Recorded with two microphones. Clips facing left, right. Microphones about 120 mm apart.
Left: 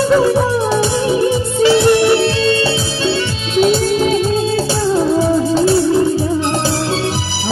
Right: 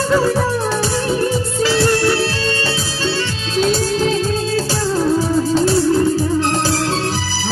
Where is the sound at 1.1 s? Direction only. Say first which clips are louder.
Left 3 dB; 15° left (ahead or behind).